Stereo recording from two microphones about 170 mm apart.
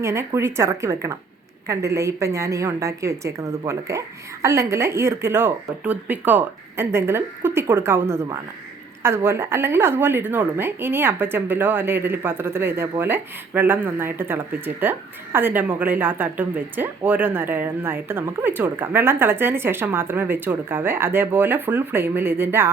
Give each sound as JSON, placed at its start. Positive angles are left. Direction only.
{"t": 0.0, "sound": "a woman's voice", "side_deg": -15}